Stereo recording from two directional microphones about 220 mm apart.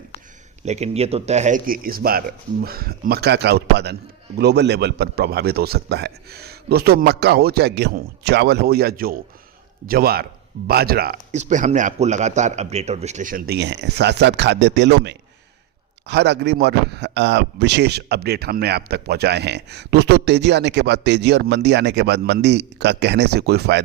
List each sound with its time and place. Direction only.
0.6 s a man's voice: 30° right (ahead or behind)
11.3 s a man's voice: 30° right (ahead or behind); by 23.8 s 50° right (ahead or behind)